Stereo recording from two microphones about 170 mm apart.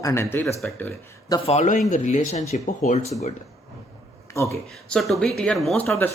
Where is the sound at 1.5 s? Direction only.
45° left (ahead or behind).